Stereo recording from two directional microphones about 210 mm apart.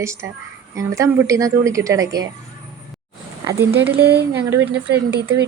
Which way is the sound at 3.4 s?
10° right (ahead or behind).